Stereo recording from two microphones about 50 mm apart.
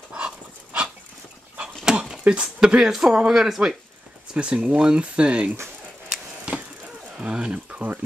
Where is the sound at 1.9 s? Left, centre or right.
Centre.